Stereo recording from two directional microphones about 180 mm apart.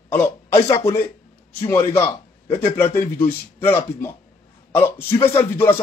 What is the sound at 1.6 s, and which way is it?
A man's voice, 15° left (ahead or behind).